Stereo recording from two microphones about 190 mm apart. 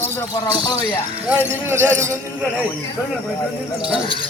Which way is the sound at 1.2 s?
10° right (ahead or behind).